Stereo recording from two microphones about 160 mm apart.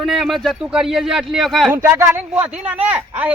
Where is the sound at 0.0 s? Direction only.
Centre (ahead or behind).